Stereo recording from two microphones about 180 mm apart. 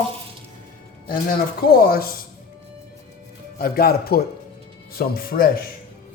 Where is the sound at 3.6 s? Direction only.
55° left (ahead or behind).